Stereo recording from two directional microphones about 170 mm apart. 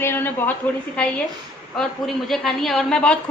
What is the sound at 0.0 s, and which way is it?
A man's voice, 10° left (ahead or behind).